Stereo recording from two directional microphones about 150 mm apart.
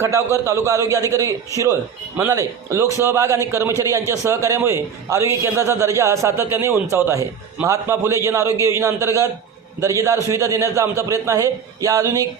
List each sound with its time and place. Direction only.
0.4 s a man's voice: 20° right (ahead or behind)